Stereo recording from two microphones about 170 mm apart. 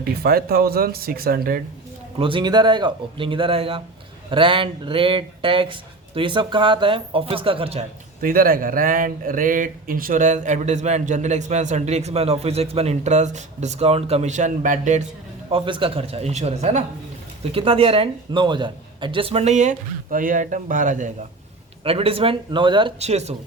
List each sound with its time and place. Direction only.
0.0 s speech: 60° right (ahead or behind)
2.1 s speech: 30° right (ahead or behind)
8.2 s speech: 55° right (ahead or behind)
15.4 s speech: 30° right (ahead or behind); by 21.1 s 50° right (ahead or behind)
21.8 s speech: 35° right (ahead or behind)